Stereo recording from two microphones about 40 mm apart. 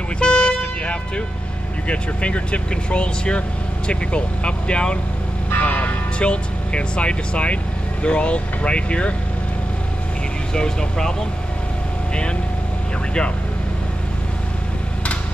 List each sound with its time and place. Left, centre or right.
0.2 s vehicle: left
1.9 s speech: left
5.6 s speech: left
10.5 s speech: centre